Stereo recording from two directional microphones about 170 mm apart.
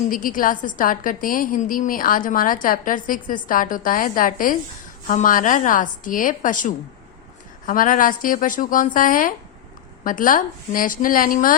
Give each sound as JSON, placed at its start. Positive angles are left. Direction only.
{"t": 0.1, "sound": "a woman's voice", "side_deg": 55}